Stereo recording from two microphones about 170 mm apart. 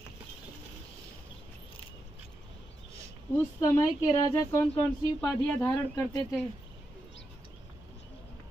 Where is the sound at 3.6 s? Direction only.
20° left (ahead or behind).